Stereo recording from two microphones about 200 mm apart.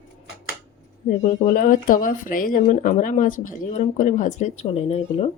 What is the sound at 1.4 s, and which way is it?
Speech, 45° left (ahead or behind).